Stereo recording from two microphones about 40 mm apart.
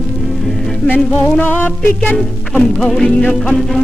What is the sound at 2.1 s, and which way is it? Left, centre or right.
Music, centre.